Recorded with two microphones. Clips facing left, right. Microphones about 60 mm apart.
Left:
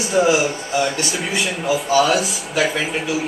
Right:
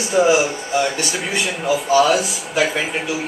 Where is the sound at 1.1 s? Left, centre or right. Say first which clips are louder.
Even; centre.